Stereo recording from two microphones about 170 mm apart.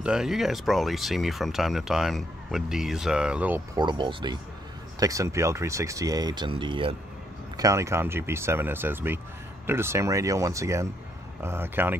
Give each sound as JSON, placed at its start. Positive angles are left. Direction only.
{"t": 0.0, "sound": "speech", "side_deg": -5}
{"t": 3.7, "sound": "speech", "side_deg": -25}
{"t": 7.5, "sound": "speech", "side_deg": -20}